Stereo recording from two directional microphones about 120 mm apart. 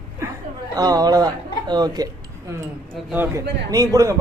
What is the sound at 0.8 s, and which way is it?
Speech, 30° right (ahead or behind).